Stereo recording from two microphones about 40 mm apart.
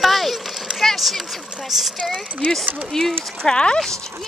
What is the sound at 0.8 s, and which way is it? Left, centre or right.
Speech, centre.